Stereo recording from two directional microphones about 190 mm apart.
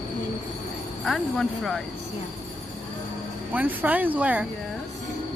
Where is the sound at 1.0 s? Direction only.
Centre (ahead or behind).